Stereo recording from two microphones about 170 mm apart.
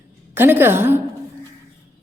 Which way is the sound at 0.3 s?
15° right (ahead or behind).